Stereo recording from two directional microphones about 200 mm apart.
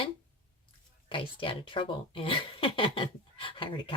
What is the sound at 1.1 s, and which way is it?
Speech, 25° left (ahead or behind).